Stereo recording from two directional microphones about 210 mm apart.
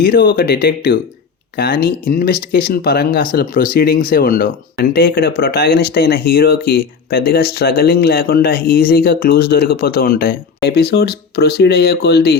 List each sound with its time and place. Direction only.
0.0 s speech: 50° left (ahead or behind)